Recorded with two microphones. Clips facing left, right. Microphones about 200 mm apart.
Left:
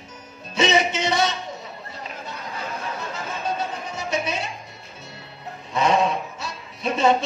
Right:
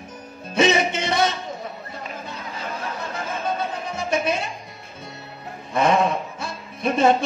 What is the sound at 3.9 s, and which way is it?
Music, 55° right (ahead or behind).